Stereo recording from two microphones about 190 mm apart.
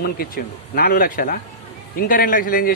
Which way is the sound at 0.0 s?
50° left (ahead or behind).